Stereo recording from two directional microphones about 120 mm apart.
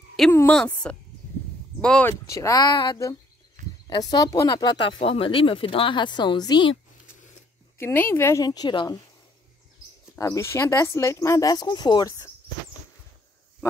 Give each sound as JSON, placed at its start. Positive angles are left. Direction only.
{"t": 0.5, "sound": "a woman's voice", "side_deg": 10}
{"t": 2.0, "sound": "speech", "side_deg": 25}
{"t": 7.8, "sound": "speech", "side_deg": 20}
{"t": 8.5, "sound": "speech", "side_deg": 35}
{"t": 10.1, "sound": "speech", "side_deg": 25}